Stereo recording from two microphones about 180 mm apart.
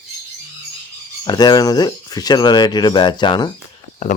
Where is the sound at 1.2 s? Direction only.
25° left (ahead or behind).